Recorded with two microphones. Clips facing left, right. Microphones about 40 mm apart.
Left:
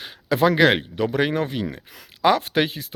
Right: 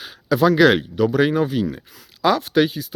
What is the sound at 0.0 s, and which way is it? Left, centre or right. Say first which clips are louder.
Speech: right 2 dB; centre.